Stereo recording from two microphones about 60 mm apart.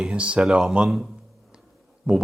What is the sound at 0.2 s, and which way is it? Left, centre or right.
Speech, right.